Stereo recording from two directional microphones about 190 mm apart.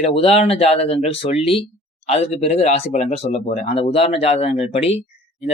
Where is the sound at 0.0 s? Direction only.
30° left (ahead or behind).